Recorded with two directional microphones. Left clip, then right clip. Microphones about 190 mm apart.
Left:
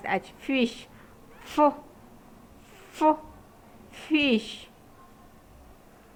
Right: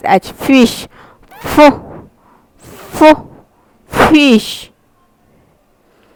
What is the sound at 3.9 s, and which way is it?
Speech, 50° right (ahead or behind).